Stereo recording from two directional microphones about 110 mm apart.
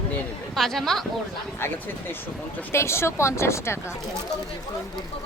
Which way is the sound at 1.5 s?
20° left (ahead or behind).